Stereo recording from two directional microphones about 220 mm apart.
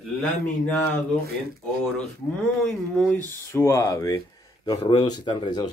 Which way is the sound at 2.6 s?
5° left (ahead or behind).